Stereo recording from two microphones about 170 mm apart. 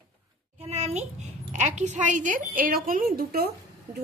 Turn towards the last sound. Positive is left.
turn(degrees=-65)  # may be behind; listen again after turning